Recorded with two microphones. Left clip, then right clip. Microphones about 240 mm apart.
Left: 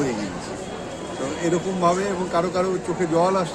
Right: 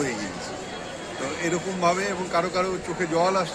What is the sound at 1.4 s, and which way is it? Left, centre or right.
A man's voice, centre.